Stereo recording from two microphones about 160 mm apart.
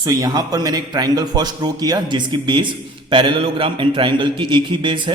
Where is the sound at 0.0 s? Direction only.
20° right (ahead or behind).